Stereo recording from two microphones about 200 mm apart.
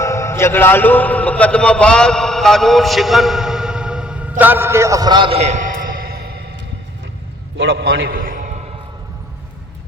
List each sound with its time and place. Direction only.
0.0 s a man's voice: 15° left (ahead or behind); by 6.4 s 50° right (ahead or behind)
7.6 s a man's voice: 65° right (ahead or behind); by 8.6 s 35° right (ahead or behind)